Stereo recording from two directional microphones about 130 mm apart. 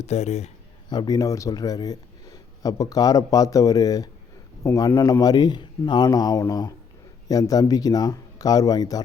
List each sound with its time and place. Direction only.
0.0 s a man's voice: 60° left (ahead or behind)
0.9 s a man's voice: 30° left (ahead or behind)